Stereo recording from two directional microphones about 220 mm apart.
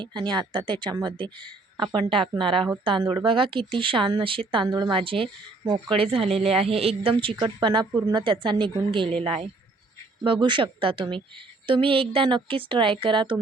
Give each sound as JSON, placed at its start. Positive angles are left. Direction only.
{"t": 0.0, "sound": "a woman's voice", "side_deg": -20}
{"t": 10.2, "sound": "a woman's voice", "side_deg": -20}